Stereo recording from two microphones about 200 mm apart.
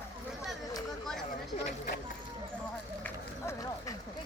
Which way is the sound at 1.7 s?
45° left (ahead or behind).